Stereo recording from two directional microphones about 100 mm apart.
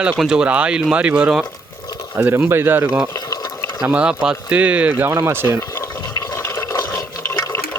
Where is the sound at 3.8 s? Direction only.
10° right (ahead or behind).